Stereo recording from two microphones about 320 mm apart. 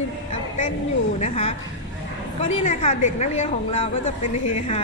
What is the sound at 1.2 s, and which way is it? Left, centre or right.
A woman's voice, centre.